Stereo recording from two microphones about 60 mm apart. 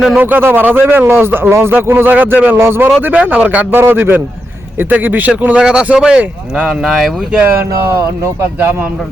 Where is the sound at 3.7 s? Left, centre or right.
Right; by 6.8 s centre.